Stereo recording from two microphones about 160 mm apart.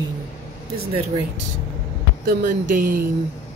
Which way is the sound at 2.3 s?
55° right (ahead or behind).